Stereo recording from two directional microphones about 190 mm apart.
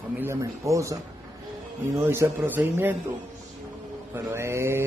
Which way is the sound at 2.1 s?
10° right (ahead or behind).